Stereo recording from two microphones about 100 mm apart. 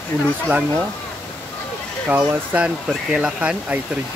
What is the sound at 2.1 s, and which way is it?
Speech, 20° right (ahead or behind).